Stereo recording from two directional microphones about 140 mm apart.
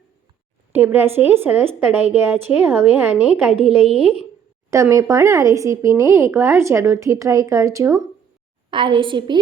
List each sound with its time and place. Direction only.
0.7 s a woman's voice: 15° right (ahead or behind)
3.5 s speech: 45° right (ahead or behind)
4.7 s a woman's voice: 20° right (ahead or behind)
8.7 s a woman's voice: 35° right (ahead or behind)